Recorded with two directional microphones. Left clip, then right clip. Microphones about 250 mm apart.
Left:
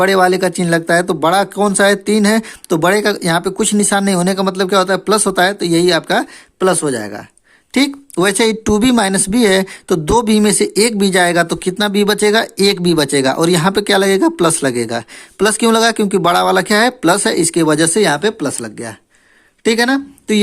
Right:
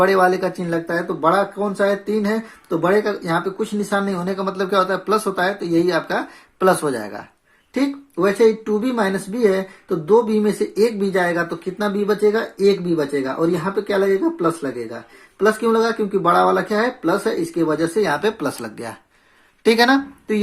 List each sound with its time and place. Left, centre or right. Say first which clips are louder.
0.0 s speech: left 4 dB; left
7.7 s speech: left 6 dB; left